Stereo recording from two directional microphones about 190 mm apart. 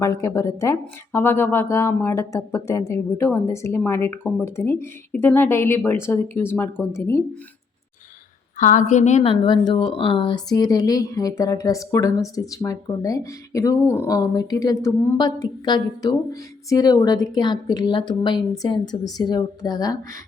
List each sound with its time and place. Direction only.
0.0 s speech: 15° left (ahead or behind)
8.5 s a woman's voice: 40° left (ahead or behind)
9.4 s speech: 25° left (ahead or behind)